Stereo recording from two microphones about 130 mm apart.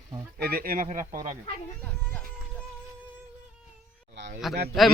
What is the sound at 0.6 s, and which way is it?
Speech, 90° right.